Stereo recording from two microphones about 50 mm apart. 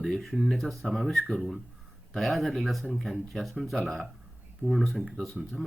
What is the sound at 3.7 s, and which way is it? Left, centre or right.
Speech, centre.